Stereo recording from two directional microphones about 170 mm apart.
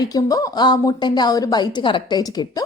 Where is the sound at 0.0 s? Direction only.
20° left (ahead or behind).